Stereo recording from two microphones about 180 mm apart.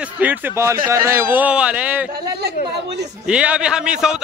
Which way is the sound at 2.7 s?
70° right (ahead or behind).